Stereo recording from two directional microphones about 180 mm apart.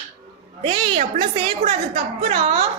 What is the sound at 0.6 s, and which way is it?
A woman's voice, 30° right (ahead or behind).